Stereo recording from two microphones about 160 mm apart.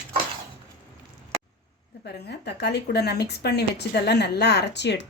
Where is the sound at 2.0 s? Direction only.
90° left.